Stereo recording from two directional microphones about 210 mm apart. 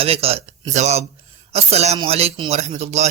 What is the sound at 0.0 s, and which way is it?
A man's voice, 30° right (ahead or behind).